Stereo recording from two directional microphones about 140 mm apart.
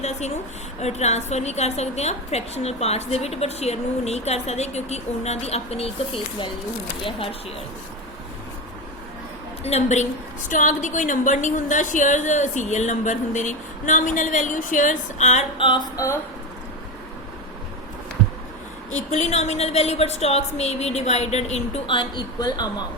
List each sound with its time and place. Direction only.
0.0 s a sound: 55° left (ahead or behind)
0.8 s a woman's voice: 50° left (ahead or behind)
7.0 s speech: 40° left (ahead or behind)
9.6 s a woman's voice: 50° left (ahead or behind)
10.5 s a woman's voice: 65° left (ahead or behind)
15.5 s speech: 35° left (ahead or behind)
18.9 s a woman's voice: 55° left (ahead or behind)
21.9 s speech: 30° left (ahead or behind)